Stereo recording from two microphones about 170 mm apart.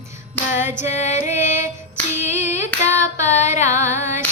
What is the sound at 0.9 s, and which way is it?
Music, 45° left (ahead or behind).